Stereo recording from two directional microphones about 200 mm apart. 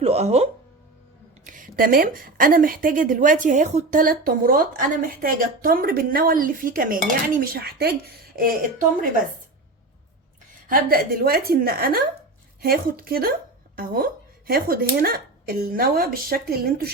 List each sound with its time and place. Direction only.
0.0 s music: 30° right (ahead or behind)
1.5 s a woman's voice: 45° right (ahead or behind)
10.7 s a woman's voice: 45° right (ahead or behind)